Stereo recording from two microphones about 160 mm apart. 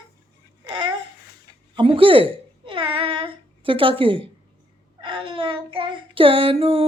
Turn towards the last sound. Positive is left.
turn(degrees=-35)  # may be behind; listen again after turning